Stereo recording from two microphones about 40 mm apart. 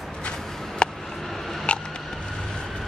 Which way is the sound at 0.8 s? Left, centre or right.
Left.